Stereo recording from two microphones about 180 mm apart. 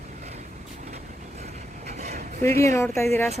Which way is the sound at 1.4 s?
40° right (ahead or behind).